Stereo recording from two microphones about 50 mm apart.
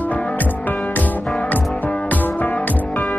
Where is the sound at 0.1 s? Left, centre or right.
Left.